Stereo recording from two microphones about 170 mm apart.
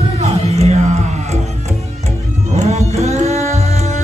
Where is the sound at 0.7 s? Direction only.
40° right (ahead or behind).